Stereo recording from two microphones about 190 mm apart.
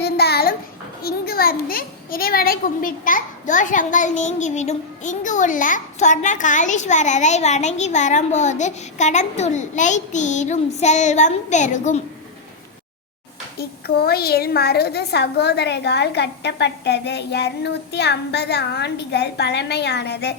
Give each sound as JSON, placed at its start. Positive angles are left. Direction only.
{"t": 0.0, "sound": "a sound", "side_deg": 55}
{"t": 1.0, "sound": "a child's voice", "side_deg": 50}
{"t": 13.6, "sound": "a woman's voice", "side_deg": 55}